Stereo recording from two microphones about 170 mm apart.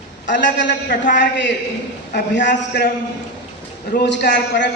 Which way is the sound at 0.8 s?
75° left (ahead or behind).